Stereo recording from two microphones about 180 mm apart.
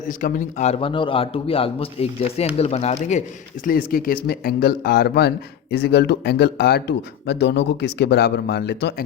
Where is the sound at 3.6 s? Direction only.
50° left (ahead or behind).